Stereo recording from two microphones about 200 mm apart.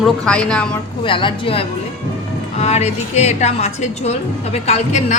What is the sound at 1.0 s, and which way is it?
A woman's voice, 25° left (ahead or behind).